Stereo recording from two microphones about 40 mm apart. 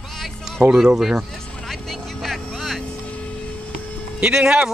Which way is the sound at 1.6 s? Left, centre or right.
Centre.